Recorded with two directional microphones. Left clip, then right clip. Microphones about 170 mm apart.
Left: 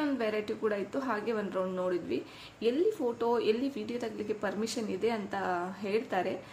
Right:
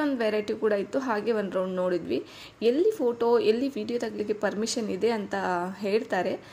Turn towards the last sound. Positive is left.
turn(degrees=-35)  # may be behind; listen again after turning